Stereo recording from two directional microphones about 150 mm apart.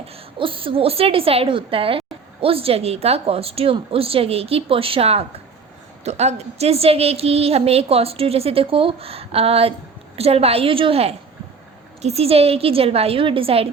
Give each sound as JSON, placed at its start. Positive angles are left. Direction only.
{"t": 0.3, "sound": "a woman's voice", "side_deg": -35}